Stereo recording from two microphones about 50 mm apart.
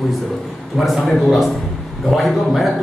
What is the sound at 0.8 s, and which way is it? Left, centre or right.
A man's voice, centre.